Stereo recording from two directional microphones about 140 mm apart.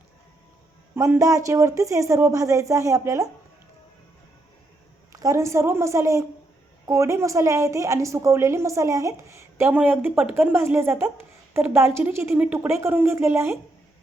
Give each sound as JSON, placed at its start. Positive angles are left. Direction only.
{"t": 0.9, "sound": "a woman's voice", "side_deg": -20}
{"t": 5.1, "sound": "a woman's voice", "side_deg": -20}